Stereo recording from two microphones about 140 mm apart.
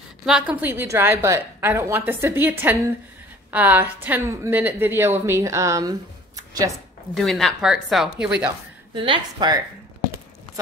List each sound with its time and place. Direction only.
0.2 s a woman's voice: 5° right (ahead or behind); by 6.7 s 25° right (ahead or behind)
7.2 s a woman's voice: centre (ahead or behind)
8.9 s a woman's voice: 35° right (ahead or behind)